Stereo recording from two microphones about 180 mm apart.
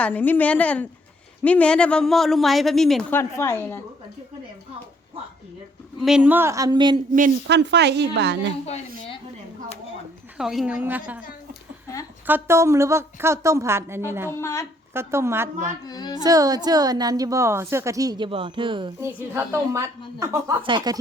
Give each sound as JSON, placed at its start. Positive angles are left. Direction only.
{"t": 0.0, "sound": "a woman's voice", "side_deg": 10}
{"t": 3.1, "sound": "a woman's voice", "side_deg": 15}
{"t": 6.0, "sound": "a woman's voice", "side_deg": -5}
{"t": 7.4, "sound": "a woman's voice", "side_deg": -75}
{"t": 8.6, "sound": "a woman's voice", "side_deg": 35}
{"t": 10.3, "sound": "a woman's voice", "side_deg": 0}
{"t": 12.2, "sound": "a woman's voice", "side_deg": -10}
{"t": 14.3, "sound": "a woman's voice", "side_deg": 15}
{"t": 14.9, "sound": "a woman's voice", "side_deg": -15}
{"t": 15.9, "sound": "a woman's voice", "side_deg": 25}
{"t": 16.2, "sound": "a woman's voice", "side_deg": -20}
{"t": 18.9, "sound": "a woman's voice", "side_deg": -15}